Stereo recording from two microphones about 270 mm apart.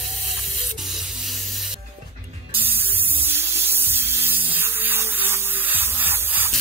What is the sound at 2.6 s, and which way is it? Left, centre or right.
Spray, centre.